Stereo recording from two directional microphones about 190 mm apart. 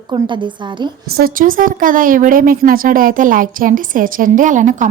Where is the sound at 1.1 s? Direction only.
55° right (ahead or behind).